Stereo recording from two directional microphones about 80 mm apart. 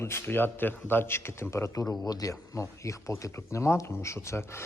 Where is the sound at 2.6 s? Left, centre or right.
Left.